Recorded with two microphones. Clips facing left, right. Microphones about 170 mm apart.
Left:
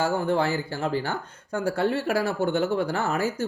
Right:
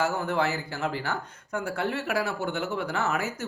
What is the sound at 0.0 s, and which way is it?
Speech, 30° left (ahead or behind).